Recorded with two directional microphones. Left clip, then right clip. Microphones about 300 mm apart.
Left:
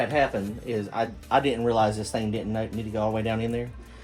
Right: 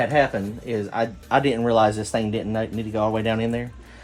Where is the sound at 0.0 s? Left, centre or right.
Right.